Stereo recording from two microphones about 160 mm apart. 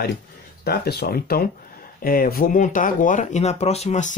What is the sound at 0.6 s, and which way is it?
Speech, 75° left (ahead or behind).